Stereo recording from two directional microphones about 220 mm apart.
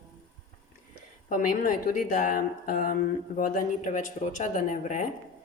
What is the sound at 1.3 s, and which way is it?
Speech, 35° left (ahead or behind).